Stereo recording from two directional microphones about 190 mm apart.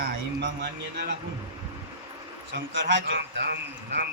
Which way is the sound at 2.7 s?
70° right (ahead or behind).